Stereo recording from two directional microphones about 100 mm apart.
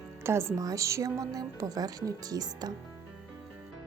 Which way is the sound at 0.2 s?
25° right (ahead or behind).